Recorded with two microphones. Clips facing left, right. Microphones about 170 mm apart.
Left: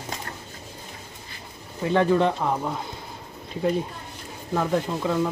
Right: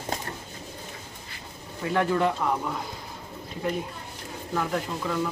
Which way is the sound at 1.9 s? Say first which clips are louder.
Left 4 dB; 20° left (ahead or behind).